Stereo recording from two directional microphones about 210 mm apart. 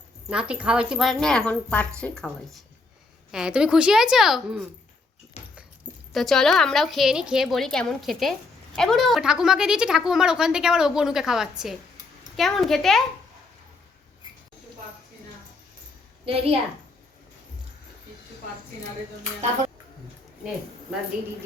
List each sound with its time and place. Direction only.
0.3 s a woman's voice: 5° right (ahead or behind)
5.4 s dog: 30° left (ahead or behind)
6.1 s a woman's voice: centre (ahead or behind)
16.2 s a child's voice: 30° right (ahead or behind)